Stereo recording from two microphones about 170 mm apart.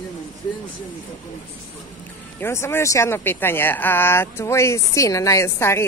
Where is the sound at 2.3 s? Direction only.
15° left (ahead or behind).